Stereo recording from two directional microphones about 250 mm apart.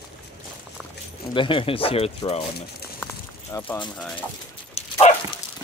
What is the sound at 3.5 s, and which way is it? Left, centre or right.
Speech, centre.